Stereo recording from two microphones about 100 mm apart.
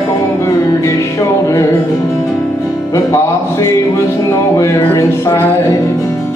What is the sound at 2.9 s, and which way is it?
Music, 30° left (ahead or behind).